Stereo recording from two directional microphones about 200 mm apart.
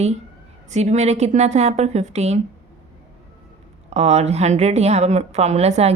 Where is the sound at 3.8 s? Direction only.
35° right (ahead or behind).